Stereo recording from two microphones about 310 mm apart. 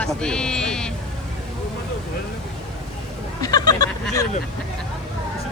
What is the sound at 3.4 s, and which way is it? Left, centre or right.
Speech, centre.